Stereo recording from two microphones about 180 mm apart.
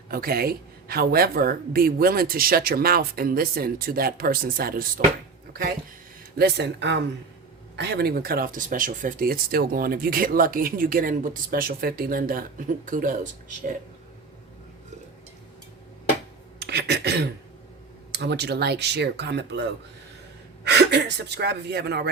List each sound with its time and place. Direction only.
0.1 s speech: 55° right (ahead or behind)
6.3 s speech: 65° right (ahead or behind); by 13.2 s 45° right (ahead or behind)
16.6 s speech: 65° right (ahead or behind)